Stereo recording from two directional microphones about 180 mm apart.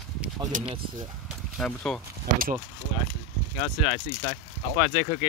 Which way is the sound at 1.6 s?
5° left (ahead or behind).